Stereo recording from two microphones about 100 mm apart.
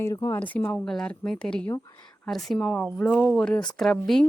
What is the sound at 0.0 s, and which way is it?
Speech, 30° left (ahead or behind).